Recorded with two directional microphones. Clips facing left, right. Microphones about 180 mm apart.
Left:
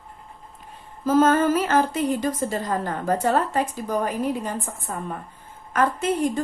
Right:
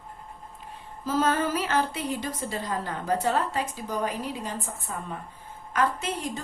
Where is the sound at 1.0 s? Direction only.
50° left (ahead or behind).